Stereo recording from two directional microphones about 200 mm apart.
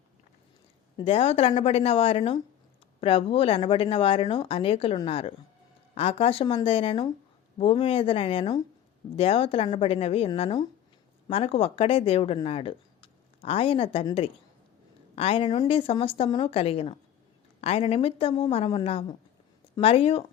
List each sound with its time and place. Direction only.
0.9 s speech: 30° left (ahead or behind)